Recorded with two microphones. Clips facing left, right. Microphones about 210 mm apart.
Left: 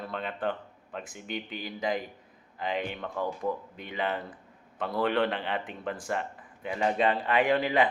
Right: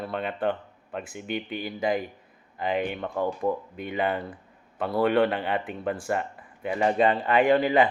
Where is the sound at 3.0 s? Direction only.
25° right (ahead or behind).